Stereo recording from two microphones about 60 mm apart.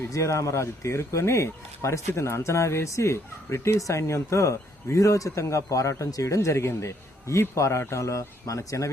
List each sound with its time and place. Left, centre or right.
0.1 s speech: left